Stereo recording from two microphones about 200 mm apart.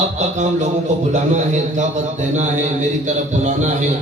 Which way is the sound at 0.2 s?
35° right (ahead or behind).